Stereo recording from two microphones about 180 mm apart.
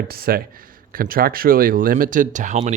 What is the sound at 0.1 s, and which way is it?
Speech, 55° right (ahead or behind).